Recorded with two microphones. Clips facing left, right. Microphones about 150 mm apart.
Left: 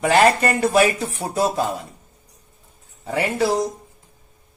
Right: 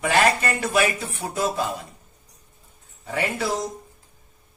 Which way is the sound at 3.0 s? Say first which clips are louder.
Left 5 dB; 35° left (ahead or behind).